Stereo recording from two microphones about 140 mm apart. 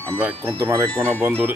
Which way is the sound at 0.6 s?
20° right (ahead or behind).